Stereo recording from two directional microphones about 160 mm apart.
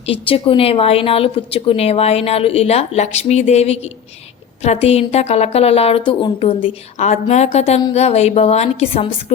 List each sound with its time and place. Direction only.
0.0 s a woman's voice: 35° left (ahead or behind)